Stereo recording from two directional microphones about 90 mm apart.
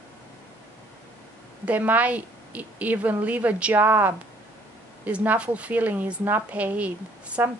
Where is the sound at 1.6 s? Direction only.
15° right (ahead or behind).